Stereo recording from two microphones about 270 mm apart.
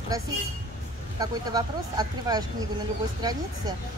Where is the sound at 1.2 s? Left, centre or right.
Centre.